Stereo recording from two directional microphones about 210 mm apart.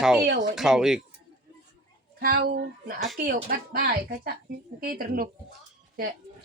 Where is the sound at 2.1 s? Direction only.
45° right (ahead or behind).